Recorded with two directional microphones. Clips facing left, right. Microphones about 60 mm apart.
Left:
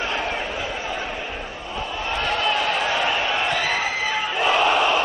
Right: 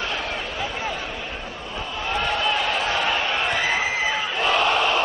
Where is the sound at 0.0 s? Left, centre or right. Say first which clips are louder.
Left 2 dB; left.